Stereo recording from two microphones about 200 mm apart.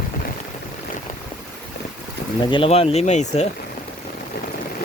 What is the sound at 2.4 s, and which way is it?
Speech, 25° left (ahead or behind).